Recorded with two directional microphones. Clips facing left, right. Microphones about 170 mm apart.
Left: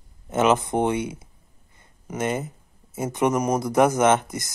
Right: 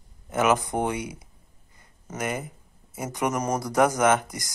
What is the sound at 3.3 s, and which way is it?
Speech, 10° left (ahead or behind).